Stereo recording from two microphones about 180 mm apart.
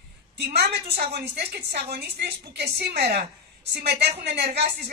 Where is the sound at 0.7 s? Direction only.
65° right (ahead or behind).